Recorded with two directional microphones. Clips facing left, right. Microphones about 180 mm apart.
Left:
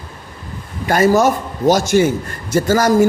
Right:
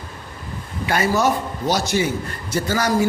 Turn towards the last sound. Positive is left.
turn(degrees=45)  # may be behind; listen again after turning